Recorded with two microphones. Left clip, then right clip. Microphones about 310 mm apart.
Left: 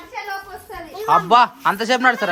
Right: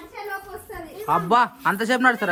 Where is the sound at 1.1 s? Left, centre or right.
Centre.